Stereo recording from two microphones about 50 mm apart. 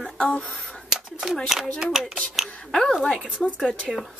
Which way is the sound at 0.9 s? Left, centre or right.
Centre.